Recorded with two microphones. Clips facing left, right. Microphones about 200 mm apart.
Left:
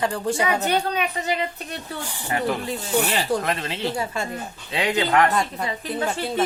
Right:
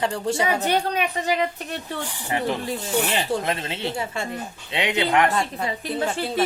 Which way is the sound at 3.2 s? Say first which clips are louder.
Left 1 dB; 25° right (ahead or behind).